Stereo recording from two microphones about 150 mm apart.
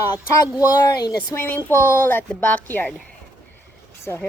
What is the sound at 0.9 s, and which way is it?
Speech, 25° left (ahead or behind).